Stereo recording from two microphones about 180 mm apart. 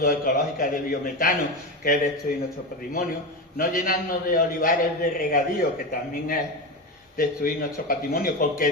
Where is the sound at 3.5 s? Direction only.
50° left (ahead or behind).